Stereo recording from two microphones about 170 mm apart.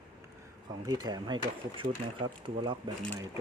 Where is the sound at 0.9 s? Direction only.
25° right (ahead or behind).